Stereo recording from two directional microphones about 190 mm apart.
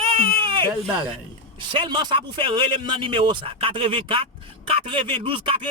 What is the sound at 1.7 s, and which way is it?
Speech, 25° right (ahead or behind).